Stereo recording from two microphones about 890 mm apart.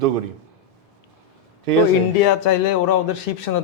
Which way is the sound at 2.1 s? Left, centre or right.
Left.